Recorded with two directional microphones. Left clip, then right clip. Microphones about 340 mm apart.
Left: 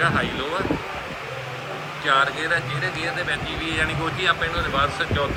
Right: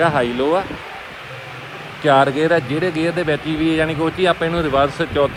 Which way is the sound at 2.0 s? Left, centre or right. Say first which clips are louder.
Right 6 dB; centre.